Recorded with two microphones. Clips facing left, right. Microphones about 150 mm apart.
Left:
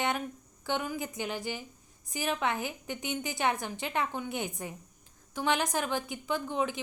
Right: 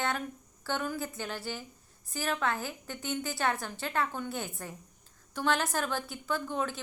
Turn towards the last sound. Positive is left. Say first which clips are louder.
# left 1 dB
turn(degrees=15)  # may be behind; listen again after turning